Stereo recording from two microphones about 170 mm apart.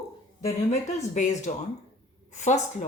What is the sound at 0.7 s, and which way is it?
A woman's voice, 45° left (ahead or behind).